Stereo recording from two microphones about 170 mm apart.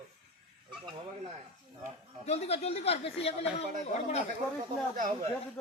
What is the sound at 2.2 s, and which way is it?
Speech, 40° left (ahead or behind).